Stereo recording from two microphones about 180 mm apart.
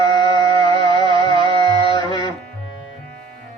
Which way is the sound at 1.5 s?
25° left (ahead or behind).